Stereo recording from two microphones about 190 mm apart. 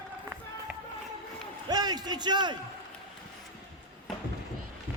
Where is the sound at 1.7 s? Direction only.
20° right (ahead or behind).